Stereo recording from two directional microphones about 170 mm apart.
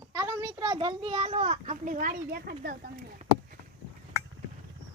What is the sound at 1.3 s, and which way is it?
A child's voice, 40° right (ahead or behind).